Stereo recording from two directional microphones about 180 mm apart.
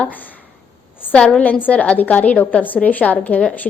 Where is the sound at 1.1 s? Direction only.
5° left (ahead or behind).